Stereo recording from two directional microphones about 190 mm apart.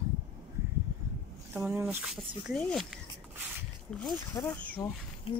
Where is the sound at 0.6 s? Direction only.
15° right (ahead or behind).